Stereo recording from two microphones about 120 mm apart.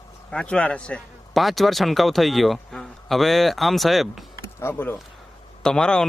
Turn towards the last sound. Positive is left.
turn(degrees=5)  # may be behind; listen again after turning